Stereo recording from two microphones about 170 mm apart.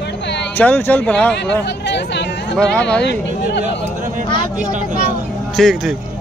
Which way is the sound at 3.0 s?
90° left.